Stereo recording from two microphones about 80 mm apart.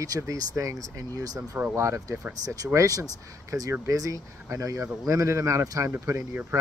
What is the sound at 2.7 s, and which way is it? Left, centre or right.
Speech, right.